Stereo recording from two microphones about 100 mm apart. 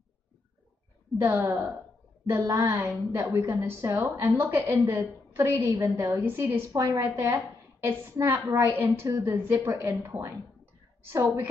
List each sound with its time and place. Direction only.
1.2 s a woman's voice: 25° right (ahead or behind)